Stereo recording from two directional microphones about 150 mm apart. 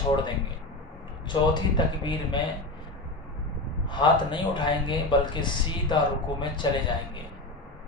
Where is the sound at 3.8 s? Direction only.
30° left (ahead or behind).